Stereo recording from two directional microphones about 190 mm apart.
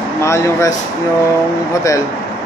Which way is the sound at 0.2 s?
15° left (ahead or behind).